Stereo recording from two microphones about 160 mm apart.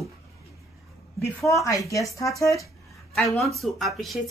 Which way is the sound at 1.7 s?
20° left (ahead or behind).